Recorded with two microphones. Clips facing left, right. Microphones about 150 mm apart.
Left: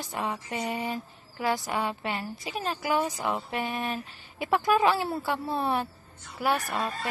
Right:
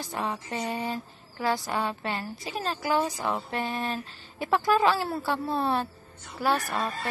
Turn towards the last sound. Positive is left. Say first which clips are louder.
# right 1 dB
turn(degrees=10)  # may be behind; listen again after turning